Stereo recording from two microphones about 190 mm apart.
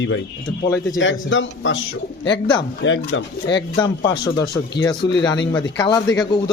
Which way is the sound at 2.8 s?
80° left.